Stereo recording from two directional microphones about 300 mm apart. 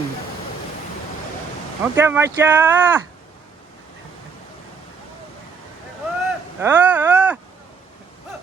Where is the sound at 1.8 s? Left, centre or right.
Centre.